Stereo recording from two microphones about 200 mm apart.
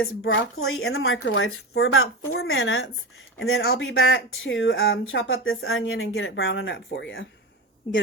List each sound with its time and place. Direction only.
0.0 s speech: 75° left (ahead or behind)
1.8 s a woman's voice: 90° left
3.7 s speech: 65° left (ahead or behind)